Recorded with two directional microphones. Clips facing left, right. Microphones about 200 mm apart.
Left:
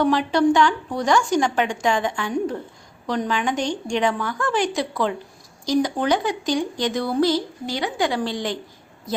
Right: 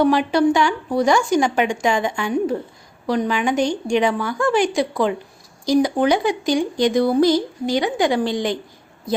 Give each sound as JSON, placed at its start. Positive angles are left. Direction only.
{"t": 0.0, "sound": "speech", "side_deg": -10}